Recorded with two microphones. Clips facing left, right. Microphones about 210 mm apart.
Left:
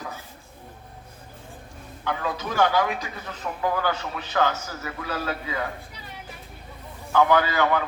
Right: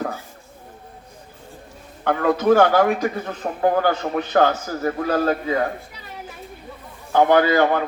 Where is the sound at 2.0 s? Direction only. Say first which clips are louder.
Right 12 dB; 55° right (ahead or behind).